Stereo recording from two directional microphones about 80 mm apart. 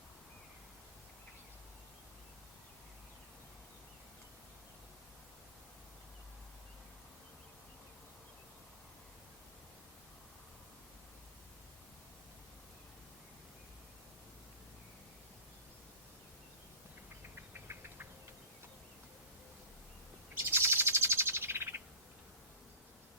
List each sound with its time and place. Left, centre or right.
17.5 s engine knocking: right
20.4 s bird: right